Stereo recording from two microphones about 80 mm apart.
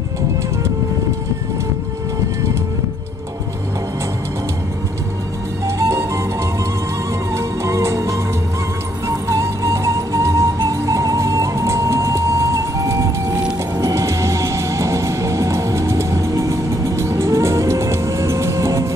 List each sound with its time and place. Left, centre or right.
5.7 s music: right
7.3 s music: right